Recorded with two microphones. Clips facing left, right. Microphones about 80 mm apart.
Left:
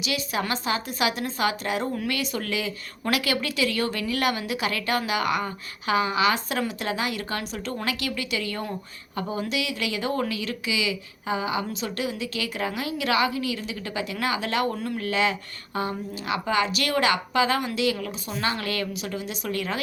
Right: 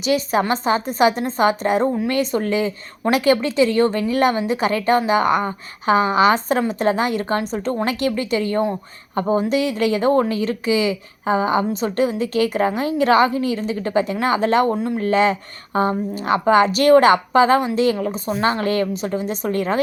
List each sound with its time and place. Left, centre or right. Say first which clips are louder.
0.0 s a woman's voice: right 9 dB; right